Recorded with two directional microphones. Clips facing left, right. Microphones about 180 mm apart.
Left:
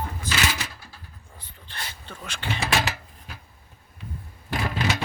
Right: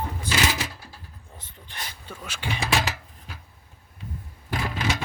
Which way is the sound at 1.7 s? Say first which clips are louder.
Even; 10° right (ahead or behind).